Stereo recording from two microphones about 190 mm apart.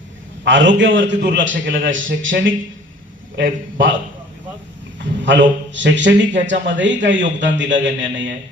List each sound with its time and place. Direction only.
0.4 s a man's voice: 70° right (ahead or behind)
1.9 s speech: 90° right
3.3 s a man's voice: 45° right (ahead or behind)
5.2 s a man's voice: 70° right (ahead or behind)